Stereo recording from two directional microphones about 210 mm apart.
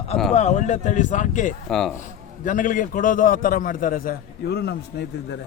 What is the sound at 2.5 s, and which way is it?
A man's voice, 40° left (ahead or behind).